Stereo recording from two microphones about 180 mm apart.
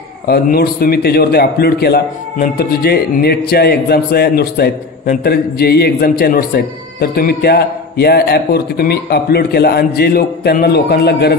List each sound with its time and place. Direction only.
0.3 s a man's voice: 60° left (ahead or behind)